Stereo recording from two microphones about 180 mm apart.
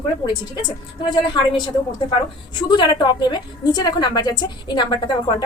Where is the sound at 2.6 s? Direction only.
25° left (ahead or behind).